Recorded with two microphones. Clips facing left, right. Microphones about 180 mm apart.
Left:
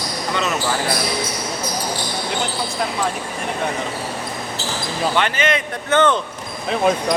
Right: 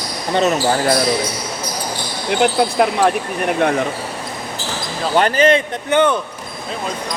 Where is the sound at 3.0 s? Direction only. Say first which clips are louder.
Right 7 dB; 70° right (ahead or behind).